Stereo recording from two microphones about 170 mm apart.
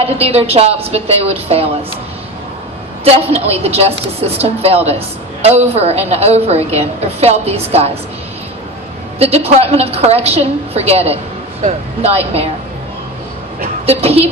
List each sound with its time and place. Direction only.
0.0 s a woman's voice: 35° right (ahead or behind)
3.0 s a woman's voice: 35° right (ahead or behind)
9.1 s a woman's voice: 35° right (ahead or behind)
13.8 s a woman's voice: 35° right (ahead or behind)